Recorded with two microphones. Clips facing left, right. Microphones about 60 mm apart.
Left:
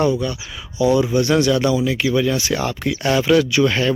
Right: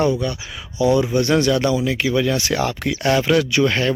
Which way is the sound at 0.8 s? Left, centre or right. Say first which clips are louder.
Left 1 dB; right.